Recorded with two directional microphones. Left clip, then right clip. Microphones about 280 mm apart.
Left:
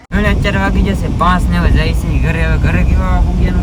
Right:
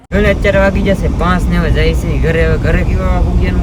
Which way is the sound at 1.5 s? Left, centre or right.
Centre.